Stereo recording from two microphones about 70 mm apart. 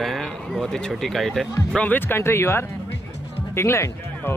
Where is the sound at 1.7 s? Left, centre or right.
Left.